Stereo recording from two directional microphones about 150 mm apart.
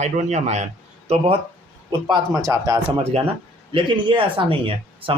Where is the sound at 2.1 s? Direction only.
25° right (ahead or behind).